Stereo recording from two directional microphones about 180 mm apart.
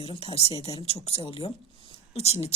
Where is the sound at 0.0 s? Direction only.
30° left (ahead or behind).